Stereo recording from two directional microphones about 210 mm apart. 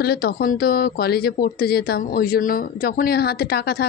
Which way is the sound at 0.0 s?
50° left (ahead or behind).